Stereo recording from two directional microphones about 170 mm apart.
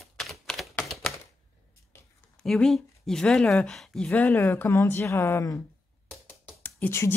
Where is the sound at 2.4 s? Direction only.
5° left (ahead or behind).